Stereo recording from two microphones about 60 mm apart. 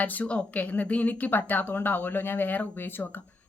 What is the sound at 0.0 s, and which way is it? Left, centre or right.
A woman's voice, left.